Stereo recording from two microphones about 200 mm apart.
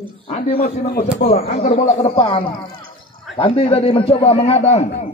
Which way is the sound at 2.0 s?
25° left (ahead or behind).